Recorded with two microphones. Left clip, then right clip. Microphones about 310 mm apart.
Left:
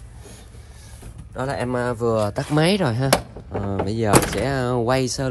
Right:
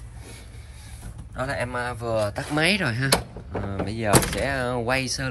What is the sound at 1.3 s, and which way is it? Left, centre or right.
Speech, centre.